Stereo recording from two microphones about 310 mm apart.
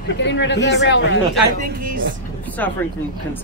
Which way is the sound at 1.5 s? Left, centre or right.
Right.